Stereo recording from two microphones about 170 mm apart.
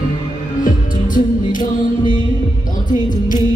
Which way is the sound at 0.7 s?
50° left (ahead or behind).